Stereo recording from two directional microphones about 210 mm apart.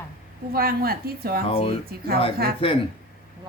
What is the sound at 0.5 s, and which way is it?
Speech, 45° right (ahead or behind).